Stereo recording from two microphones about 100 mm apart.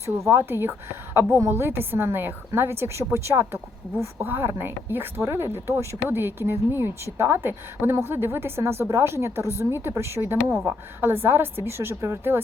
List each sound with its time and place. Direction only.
0.0 s speech: 25° right (ahead or behind)